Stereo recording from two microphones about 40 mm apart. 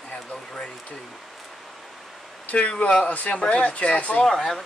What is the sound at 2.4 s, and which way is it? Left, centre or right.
Speech, left.